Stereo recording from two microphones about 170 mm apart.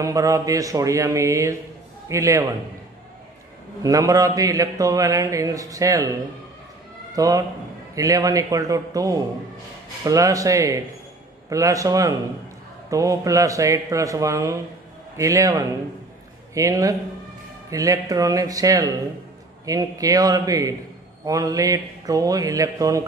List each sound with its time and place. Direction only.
0.0 s a man's voice: 20° right (ahead or behind)
3.8 s a man's voice: 20° right (ahead or behind)
7.2 s a man's voice: 20° right (ahead or behind)